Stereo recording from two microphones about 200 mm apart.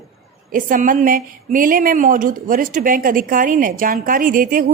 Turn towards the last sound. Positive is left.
turn(degrees=-45)  # may be behind; listen again after turning